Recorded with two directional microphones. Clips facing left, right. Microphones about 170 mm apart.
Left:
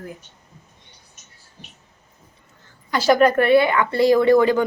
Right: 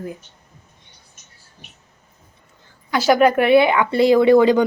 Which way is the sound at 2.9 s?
5° right (ahead or behind).